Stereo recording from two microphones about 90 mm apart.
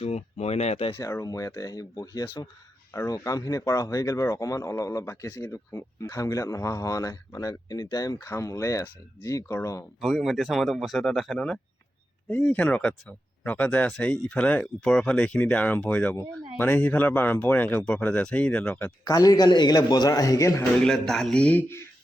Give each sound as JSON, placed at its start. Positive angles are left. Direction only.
{"t": 0.9, "sound": "a man's voice", "side_deg": 35}
{"t": 10.0, "sound": "speech", "side_deg": 0}
{"t": 12.3, "sound": "speech", "side_deg": 20}
{"t": 19.0, "sound": "a man's voice", "side_deg": 40}
{"t": 20.7, "sound": "speech", "side_deg": 5}